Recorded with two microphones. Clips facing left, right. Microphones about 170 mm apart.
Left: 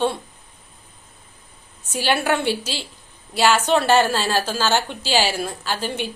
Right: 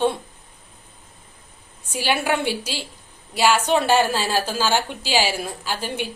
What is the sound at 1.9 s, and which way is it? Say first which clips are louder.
A woman's voice: left 1 dB; 10° right (ahead or behind).